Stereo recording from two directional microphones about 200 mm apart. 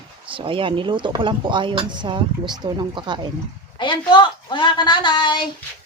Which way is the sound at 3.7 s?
25° left (ahead or behind).